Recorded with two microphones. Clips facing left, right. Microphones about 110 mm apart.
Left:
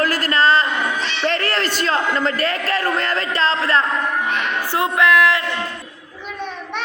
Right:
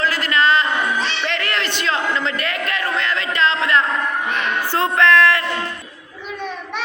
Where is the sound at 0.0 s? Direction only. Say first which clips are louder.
Left 1 dB; 45° left (ahead or behind).